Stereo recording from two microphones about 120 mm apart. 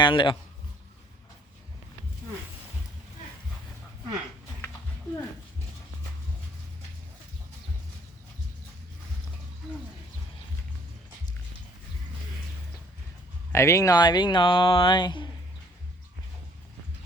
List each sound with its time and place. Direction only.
0.0 s speech: 45° left (ahead or behind)
13.5 s speech: 25° left (ahead or behind); by 15.3 s 40° left (ahead or behind)